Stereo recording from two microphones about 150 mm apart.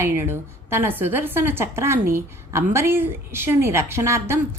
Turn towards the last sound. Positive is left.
turn(degrees=-15)  # may be behind; listen again after turning